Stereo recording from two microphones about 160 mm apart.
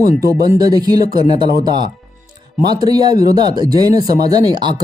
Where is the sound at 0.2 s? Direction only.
20° right (ahead or behind).